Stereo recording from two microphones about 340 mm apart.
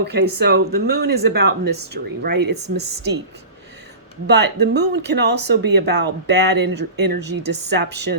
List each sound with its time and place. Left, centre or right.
0.0 s speech: right
4.3 s a woman's voice: right